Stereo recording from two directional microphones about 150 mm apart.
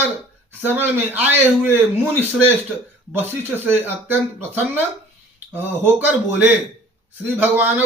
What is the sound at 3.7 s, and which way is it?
Speech, 15° right (ahead or behind).